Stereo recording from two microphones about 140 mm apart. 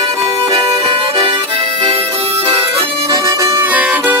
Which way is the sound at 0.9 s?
40° right (ahead or behind).